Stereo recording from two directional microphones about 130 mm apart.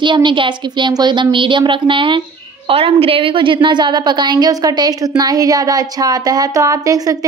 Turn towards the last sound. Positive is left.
turn(degrees=-25)  # may be behind; listen again after turning